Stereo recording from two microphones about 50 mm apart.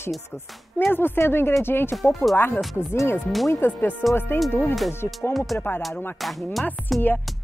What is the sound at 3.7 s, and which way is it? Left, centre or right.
Speech, left.